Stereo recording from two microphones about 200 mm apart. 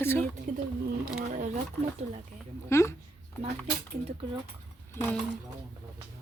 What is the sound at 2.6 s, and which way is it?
Speech, 15° left (ahead or behind).